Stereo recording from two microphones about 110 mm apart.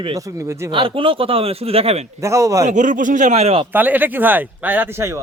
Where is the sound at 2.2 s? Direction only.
30° right (ahead or behind).